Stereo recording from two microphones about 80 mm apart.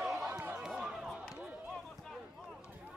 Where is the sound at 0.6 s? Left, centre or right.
Centre.